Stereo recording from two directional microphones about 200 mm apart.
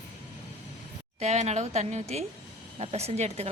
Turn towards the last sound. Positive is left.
turn(degrees=-30)  # may be behind; listen again after turning